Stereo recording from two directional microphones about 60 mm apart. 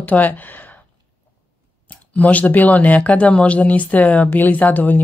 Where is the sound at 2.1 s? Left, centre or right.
Left.